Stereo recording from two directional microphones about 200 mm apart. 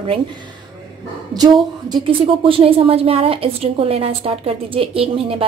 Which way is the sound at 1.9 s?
25° right (ahead or behind).